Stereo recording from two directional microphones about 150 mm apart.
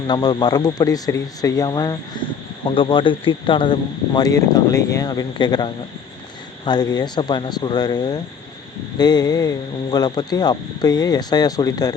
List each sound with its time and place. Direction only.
0.1 s a man's voice: 30° left (ahead or behind)